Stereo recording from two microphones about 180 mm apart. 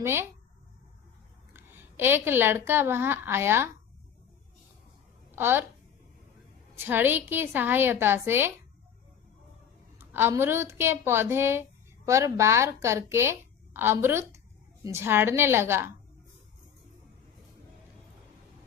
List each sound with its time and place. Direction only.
0.0 s a woman's voice: 15° right (ahead or behind)
1.5 s a woman's voice: 10° right (ahead or behind)
5.3 s a woman's voice: 10° right (ahead or behind)
6.7 s a woman's voice: 10° right (ahead or behind)
10.0 s a woman's voice: 10° right (ahead or behind)